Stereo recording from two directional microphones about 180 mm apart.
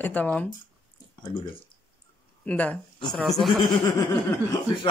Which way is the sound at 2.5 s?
5° left (ahead or behind).